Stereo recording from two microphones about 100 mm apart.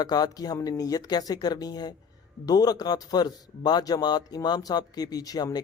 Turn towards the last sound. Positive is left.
turn(degrees=40)  # may be behind; listen again after turning